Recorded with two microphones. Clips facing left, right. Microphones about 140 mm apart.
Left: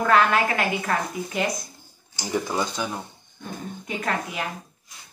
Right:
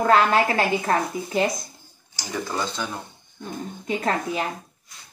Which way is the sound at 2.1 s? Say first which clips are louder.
Left 3 dB; 15° left (ahead or behind).